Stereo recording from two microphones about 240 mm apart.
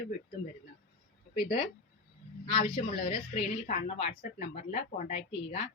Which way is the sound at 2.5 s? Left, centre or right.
Left.